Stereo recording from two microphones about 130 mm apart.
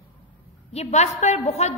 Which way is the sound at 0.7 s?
60° left (ahead or behind).